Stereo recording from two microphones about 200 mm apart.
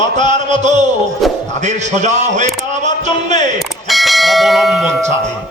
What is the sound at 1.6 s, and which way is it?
A man's voice, 35° right (ahead or behind).